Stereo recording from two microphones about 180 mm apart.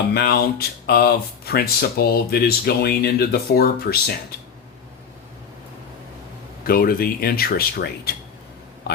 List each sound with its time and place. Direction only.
0.1 s speech: 60° left (ahead or behind)
6.7 s speech: 55° left (ahead or behind)